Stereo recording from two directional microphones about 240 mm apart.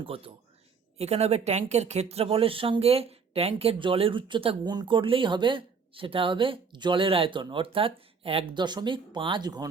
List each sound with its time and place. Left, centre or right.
0.0 s speech: right